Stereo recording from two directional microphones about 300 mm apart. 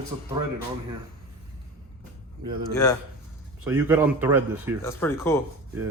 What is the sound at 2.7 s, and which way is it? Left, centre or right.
Speech, centre.